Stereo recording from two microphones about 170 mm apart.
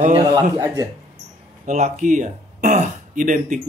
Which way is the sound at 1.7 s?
45° right (ahead or behind).